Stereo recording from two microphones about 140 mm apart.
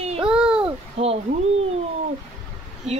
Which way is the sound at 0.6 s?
45° right (ahead or behind).